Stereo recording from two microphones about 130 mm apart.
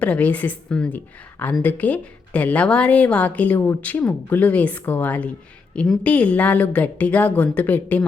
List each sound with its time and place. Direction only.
0.0 s a woman's voice: 10° left (ahead or behind)